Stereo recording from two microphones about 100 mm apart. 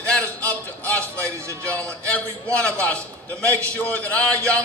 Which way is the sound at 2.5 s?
15° left (ahead or behind).